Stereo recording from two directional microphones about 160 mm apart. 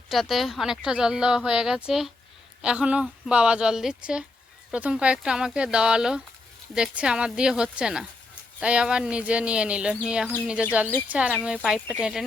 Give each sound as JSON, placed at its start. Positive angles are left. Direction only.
{"t": 0.1, "sound": "speech", "side_deg": 0}